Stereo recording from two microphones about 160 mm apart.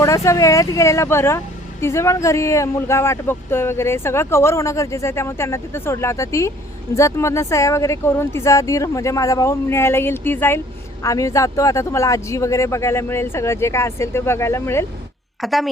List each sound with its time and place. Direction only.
0.0 s speech: 20° left (ahead or behind)
15.4 s a woman's voice: centre (ahead or behind)